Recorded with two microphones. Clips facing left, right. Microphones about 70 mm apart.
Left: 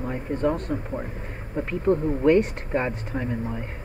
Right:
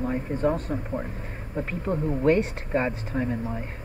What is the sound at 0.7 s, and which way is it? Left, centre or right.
Speech, centre.